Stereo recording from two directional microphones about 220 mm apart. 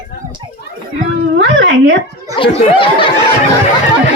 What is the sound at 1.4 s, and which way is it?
Speech, 55° right (ahead or behind).